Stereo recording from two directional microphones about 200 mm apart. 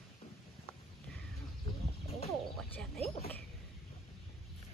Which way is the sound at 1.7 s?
30° left (ahead or behind).